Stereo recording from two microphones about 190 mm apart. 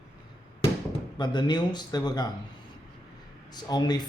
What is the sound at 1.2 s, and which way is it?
Speech, 25° left (ahead or behind).